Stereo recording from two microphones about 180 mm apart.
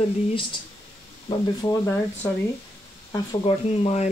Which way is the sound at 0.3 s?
30° left (ahead or behind).